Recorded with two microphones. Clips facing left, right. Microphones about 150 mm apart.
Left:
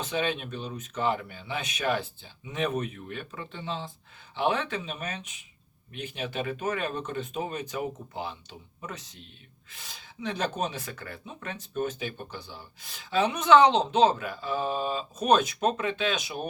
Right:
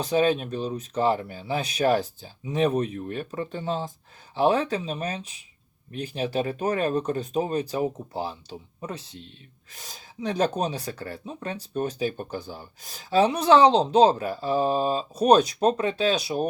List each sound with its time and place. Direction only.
0.0 s speech: 40° right (ahead or behind)